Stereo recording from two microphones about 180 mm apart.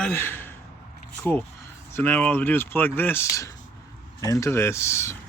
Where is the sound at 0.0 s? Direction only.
10° left (ahead or behind).